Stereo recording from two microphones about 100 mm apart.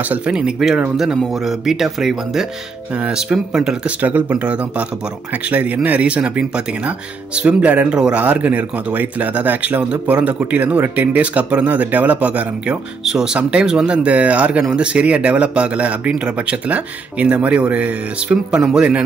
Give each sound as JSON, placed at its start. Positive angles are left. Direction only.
{"t": 0.1, "sound": "speech", "side_deg": -10}